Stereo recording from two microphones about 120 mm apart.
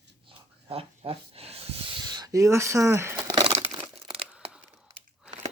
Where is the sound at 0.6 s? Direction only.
55° right (ahead or behind); by 3.1 s 20° right (ahead or behind).